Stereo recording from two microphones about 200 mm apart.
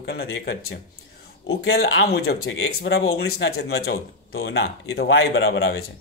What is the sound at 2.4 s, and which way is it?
Speech, 90° left.